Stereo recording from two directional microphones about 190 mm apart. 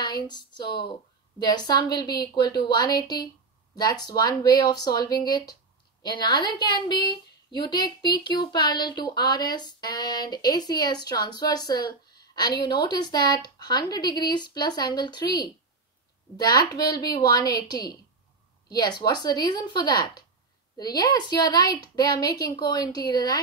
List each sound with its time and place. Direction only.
0.0 s a woman's voice: 25° left (ahead or behind)